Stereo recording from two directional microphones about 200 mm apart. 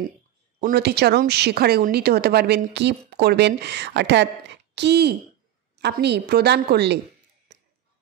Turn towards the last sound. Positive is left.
turn(degrees=-55)  # may be behind; listen again after turning